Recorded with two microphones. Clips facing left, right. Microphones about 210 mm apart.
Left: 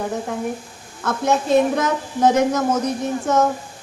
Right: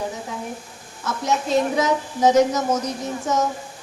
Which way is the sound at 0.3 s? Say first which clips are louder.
Left 6 dB; 55° left (ahead or behind).